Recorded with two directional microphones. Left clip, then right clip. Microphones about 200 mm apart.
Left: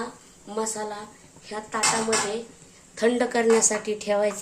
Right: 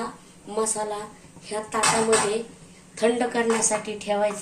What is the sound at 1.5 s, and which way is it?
Speech, 15° left (ahead or behind).